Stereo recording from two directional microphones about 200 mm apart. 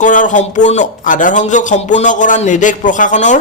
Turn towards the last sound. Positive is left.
turn(degrees=40)  # may be behind; listen again after turning